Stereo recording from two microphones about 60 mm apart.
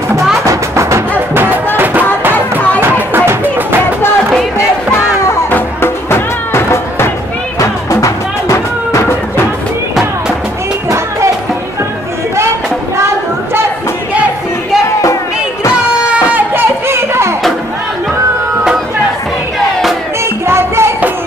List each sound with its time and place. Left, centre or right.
0.5 s music: right
1.1 s music: right
2.8 s a sound: right
4.3 s music: centre
5.5 s music: left
7.6 s music: left
13.0 s a sound: right
16.5 s a sound: right
20.4 s music: right